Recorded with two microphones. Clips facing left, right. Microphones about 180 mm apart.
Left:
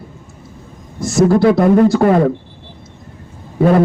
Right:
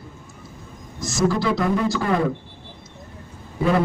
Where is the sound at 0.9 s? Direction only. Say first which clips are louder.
Left 9 dB; 60° left (ahead or behind).